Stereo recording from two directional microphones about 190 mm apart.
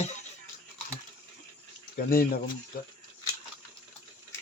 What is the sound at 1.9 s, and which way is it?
Speech, 50° left (ahead or behind).